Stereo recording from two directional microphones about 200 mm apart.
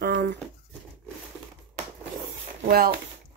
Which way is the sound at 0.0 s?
50° right (ahead or behind).